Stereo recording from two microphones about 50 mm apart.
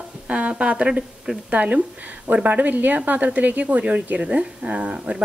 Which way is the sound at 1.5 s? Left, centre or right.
Right.